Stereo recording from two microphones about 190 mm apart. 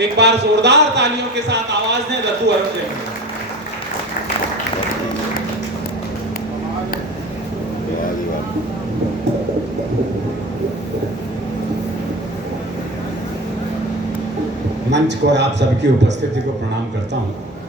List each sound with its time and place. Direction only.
0.0 s a man's voice: 65° right (ahead or behind)
2.5 s a man's voice: 60° right (ahead or behind)
14.8 s a man's voice: 65° right (ahead or behind)